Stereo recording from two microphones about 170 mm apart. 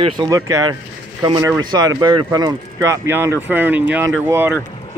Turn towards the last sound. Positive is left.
turn(degrees=-15)  # may be behind; listen again after turning